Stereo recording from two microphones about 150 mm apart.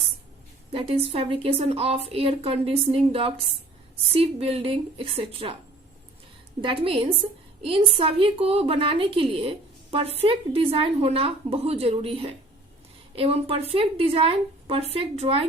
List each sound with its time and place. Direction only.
0.7 s a woman's voice: 40° right (ahead or behind)
6.6 s a woman's voice: 35° right (ahead or behind)